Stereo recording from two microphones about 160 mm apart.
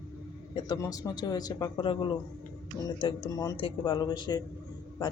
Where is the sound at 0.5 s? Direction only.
25° left (ahead or behind).